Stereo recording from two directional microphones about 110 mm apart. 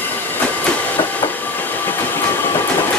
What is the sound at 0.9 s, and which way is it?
Train, 15° left (ahead or behind).